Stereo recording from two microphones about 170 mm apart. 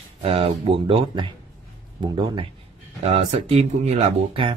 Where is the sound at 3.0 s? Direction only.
35° right (ahead or behind).